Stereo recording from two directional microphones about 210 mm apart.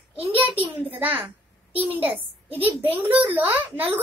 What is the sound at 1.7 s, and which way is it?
A child's voice, 10° right (ahead or behind).